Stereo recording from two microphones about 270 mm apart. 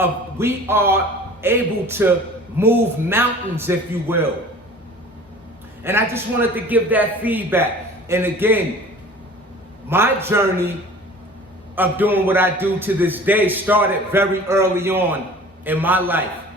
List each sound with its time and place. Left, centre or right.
0.0 s a man's voice: centre
5.8 s a man's voice: centre
9.9 s a man's voice: centre
11.7 s a man's voice: centre